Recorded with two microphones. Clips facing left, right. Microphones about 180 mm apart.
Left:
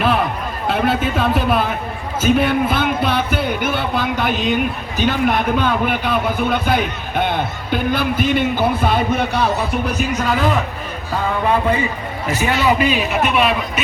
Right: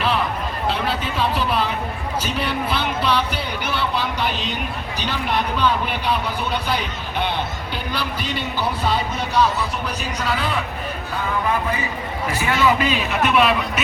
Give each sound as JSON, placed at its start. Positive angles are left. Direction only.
{"t": 0.7, "sound": "a sound", "side_deg": 50}
{"t": 2.2, "sound": "speech", "side_deg": 50}
{"t": 12.4, "sound": "a man's voice", "side_deg": 20}
{"t": 13.2, "sound": "speech", "side_deg": 0}